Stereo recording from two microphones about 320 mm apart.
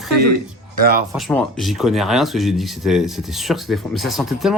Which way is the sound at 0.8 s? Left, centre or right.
Right.